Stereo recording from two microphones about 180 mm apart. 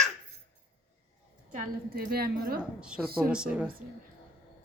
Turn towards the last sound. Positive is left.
turn(degrees=-5)  # may be behind; listen again after turning